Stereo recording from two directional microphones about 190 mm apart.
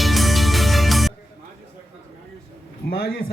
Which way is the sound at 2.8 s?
50° left (ahead or behind).